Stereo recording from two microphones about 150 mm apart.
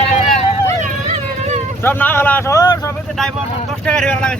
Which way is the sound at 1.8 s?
15° left (ahead or behind).